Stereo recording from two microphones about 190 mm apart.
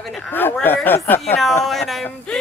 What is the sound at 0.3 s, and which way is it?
Speech, 10° left (ahead or behind).